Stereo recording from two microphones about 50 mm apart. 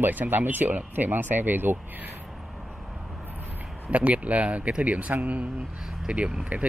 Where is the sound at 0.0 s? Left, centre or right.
Right.